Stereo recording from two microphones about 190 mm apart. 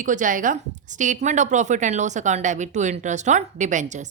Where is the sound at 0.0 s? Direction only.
45° right (ahead or behind).